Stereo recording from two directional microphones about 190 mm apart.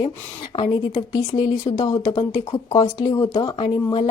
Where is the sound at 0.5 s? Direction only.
25° left (ahead or behind).